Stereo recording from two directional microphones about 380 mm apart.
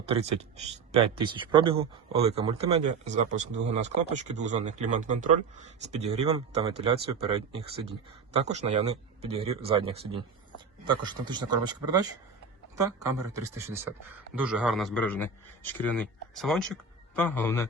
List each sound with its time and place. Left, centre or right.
0.1 s a man's voice: centre